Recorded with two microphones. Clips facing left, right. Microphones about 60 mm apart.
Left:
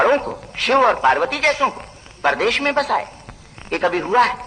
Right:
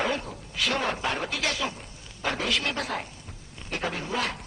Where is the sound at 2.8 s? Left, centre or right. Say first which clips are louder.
Left 13 dB; left.